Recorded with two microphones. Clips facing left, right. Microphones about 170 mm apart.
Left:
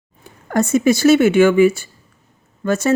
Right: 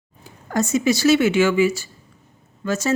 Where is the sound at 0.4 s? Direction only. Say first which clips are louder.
Left 4 dB; 55° left (ahead or behind).